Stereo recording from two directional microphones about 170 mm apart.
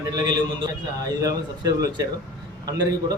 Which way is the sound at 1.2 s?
20° right (ahead or behind).